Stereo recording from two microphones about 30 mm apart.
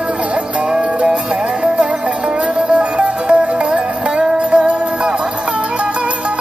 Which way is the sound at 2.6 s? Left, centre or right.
Right.